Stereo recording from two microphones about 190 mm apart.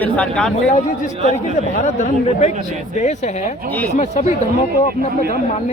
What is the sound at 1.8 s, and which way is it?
Speech, 40° left (ahead or behind).